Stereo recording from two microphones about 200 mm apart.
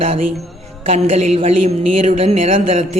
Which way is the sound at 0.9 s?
30° right (ahead or behind).